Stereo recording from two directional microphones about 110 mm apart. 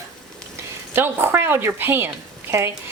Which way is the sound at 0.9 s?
20° right (ahead or behind).